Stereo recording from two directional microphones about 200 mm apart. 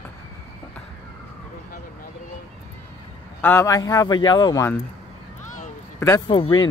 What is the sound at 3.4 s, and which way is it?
A man's voice, 10° left (ahead or behind).